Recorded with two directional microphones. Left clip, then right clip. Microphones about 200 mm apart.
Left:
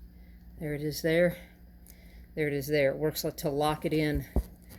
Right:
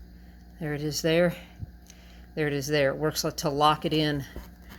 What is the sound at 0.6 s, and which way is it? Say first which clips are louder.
Speech: right 3 dB; centre (ahead or behind).